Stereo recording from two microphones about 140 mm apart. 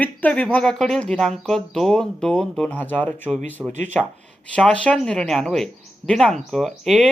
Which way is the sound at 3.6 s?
20° right (ahead or behind).